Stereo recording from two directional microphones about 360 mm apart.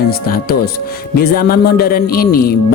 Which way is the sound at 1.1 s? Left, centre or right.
Left.